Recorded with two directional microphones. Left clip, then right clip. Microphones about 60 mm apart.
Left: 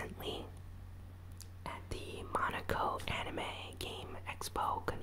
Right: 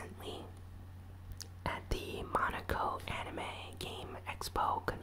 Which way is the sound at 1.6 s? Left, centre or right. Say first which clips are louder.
Right 5 dB; right.